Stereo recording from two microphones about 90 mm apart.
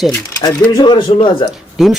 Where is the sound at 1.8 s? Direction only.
5° right (ahead or behind).